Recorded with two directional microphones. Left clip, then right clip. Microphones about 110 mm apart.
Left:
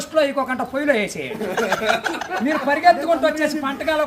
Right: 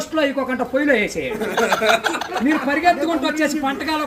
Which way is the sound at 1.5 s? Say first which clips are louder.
Right 3 dB; 45° left (ahead or behind).